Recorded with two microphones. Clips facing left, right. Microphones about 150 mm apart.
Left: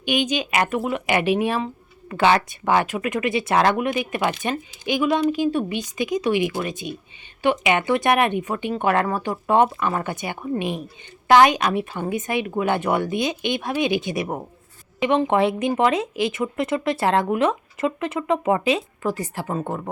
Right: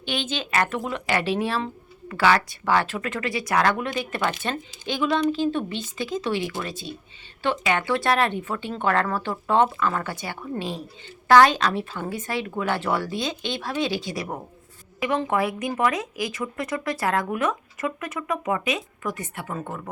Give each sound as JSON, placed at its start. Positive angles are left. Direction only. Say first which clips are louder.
{"t": 0.0, "sound": "speech", "louder": "left 6 dB", "side_deg": 15}